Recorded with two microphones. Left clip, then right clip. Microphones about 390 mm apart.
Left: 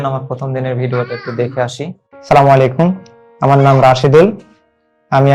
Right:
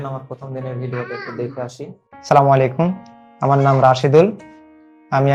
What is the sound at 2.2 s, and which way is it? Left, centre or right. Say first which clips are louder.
Speech: left 5 dB; centre.